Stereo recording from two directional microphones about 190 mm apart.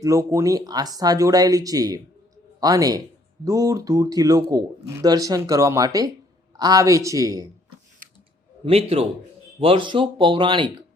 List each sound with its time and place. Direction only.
0.0 s speech: 15° right (ahead or behind)
8.6 s a man's voice: 30° right (ahead or behind)